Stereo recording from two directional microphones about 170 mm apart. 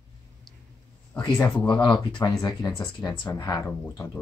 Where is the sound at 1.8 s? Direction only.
25° left (ahead or behind).